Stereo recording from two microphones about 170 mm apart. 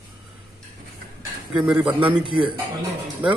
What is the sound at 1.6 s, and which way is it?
Speech, 5° right (ahead or behind).